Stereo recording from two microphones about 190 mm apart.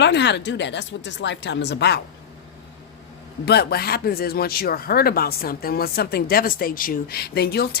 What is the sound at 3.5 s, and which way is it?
Speech, 55° left (ahead or behind).